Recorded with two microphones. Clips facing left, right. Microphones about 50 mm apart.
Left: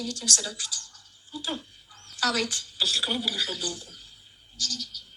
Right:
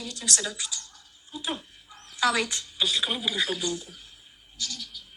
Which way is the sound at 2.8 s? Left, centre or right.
Centre.